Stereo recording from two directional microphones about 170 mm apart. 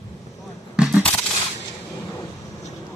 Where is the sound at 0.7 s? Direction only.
5° right (ahead or behind).